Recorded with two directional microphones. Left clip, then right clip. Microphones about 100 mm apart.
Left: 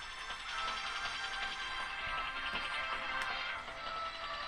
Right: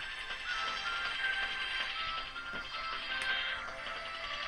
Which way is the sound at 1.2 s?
55° left (ahead or behind).